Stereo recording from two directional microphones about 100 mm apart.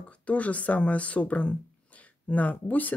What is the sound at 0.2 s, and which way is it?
Speech, 15° left (ahead or behind).